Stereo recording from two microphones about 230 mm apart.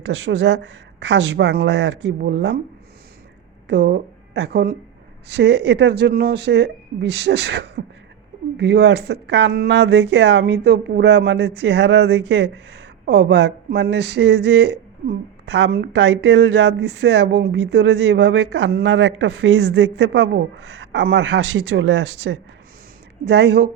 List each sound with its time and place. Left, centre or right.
0.0 s speech: right
3.7 s speech: right